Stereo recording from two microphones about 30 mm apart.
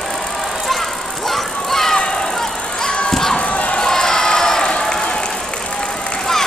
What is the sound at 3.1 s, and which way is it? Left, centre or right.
Crowd, centre.